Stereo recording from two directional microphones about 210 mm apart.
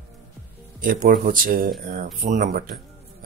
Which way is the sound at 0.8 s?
40° right (ahead or behind).